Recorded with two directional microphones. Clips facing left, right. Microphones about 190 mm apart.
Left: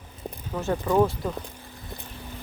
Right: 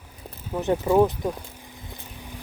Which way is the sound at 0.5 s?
15° right (ahead or behind).